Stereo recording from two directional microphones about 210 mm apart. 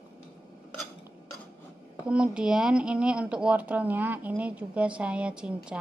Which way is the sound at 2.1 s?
5° right (ahead or behind).